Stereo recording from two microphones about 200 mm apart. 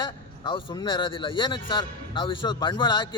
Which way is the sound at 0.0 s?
25° left (ahead or behind).